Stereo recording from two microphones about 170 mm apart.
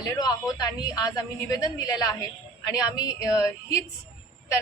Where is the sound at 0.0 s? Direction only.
20° left (ahead or behind).